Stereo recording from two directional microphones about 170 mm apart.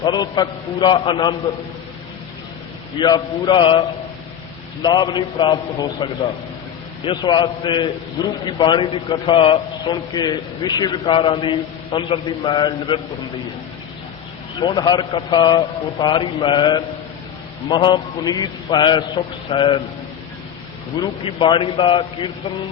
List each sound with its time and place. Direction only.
0.0 s a man's voice: 25° left (ahead or behind)
3.0 s a man's voice: 25° left (ahead or behind)
14.6 s a man's voice: 25° left (ahead or behind)
21.0 s a man's voice: 30° left (ahead or behind)